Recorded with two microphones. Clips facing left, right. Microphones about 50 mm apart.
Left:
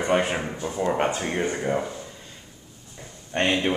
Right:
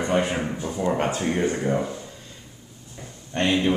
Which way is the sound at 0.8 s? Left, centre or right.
Centre.